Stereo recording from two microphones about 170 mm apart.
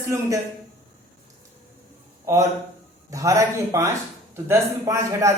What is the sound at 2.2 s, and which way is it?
A man's voice, 20° right (ahead or behind).